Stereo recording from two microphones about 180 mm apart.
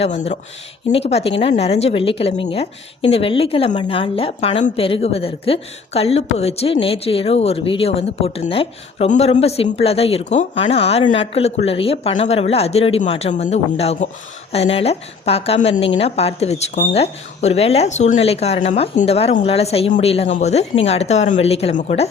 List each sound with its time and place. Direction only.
0.0 s a woman's voice: 35° left (ahead or behind)